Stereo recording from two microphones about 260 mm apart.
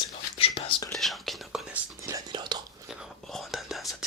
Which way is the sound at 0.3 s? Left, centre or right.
Left.